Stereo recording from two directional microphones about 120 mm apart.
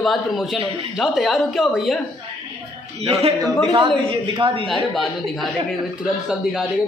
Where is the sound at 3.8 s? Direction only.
45° right (ahead or behind).